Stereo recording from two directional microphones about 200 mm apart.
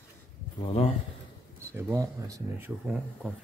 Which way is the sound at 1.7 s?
15° right (ahead or behind).